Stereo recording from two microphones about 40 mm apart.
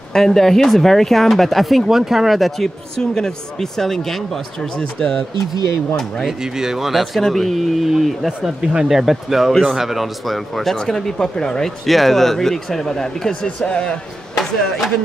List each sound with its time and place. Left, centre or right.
0.1 s speech: centre
1.9 s speech: centre
3.0 s a man's voice: centre
6.2 s speech: centre
7.2 s speech: centre
11.8 s a man's voice: centre; by 13.9 s left